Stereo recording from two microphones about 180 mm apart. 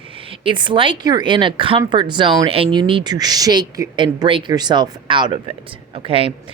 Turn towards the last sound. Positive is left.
turn(degrees=-30)  # may be behind; listen again after turning